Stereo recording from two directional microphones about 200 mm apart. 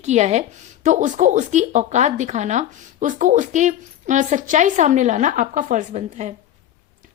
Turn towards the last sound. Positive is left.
turn(degrees=-35)  # may be behind; listen again after turning